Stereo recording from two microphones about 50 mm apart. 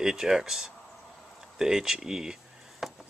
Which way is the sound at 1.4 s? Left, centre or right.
Centre.